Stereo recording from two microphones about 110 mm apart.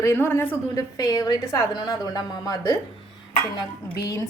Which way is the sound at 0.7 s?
35° left (ahead or behind).